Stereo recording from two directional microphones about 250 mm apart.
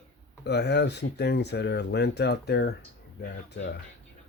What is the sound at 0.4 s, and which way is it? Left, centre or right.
Speech, left.